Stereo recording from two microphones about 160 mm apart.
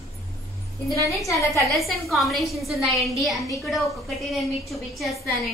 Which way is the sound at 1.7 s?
Centre (ahead or behind).